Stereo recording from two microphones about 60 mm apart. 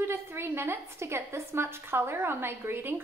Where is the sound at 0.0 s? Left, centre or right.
Right.